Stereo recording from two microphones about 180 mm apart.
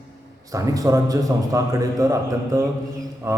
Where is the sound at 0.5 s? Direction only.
20° right (ahead or behind).